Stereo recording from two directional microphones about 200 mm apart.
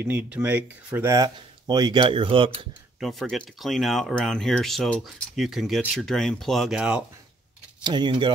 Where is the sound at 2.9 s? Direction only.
Centre (ahead or behind).